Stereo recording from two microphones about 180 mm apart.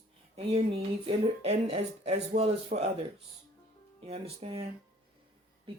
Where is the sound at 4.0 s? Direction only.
35° right (ahead or behind).